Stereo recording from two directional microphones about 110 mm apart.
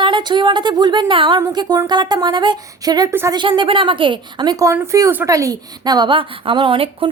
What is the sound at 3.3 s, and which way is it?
A woman's voice, 45° right (ahead or behind).